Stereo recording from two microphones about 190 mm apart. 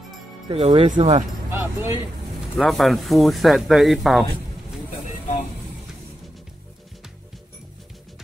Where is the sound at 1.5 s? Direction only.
10° right (ahead or behind).